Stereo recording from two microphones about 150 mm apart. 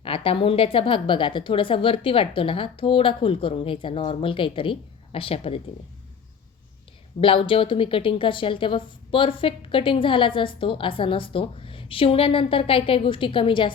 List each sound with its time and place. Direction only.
0.0 s a woman's voice: 40° left (ahead or behind)
7.2 s a woman's voice: 35° left (ahead or behind)